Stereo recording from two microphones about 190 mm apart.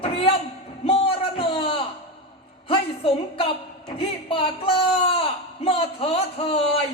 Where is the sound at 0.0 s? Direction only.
30° left (ahead or behind).